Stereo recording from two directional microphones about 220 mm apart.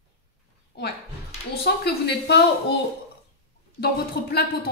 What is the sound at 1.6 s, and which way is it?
A woman's voice, 50° left (ahead or behind).